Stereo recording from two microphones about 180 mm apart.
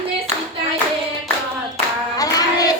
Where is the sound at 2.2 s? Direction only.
20° left (ahead or behind).